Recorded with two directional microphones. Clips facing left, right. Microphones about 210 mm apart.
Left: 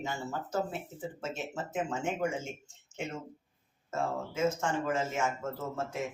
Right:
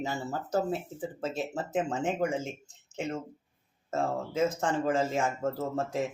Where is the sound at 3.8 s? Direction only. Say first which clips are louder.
Right 3 dB; 35° right (ahead or behind).